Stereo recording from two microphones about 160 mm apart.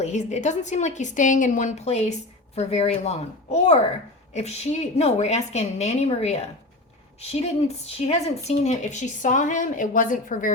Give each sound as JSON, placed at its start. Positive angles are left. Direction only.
{"t": 0.0, "sound": "a woman's voice", "side_deg": 50}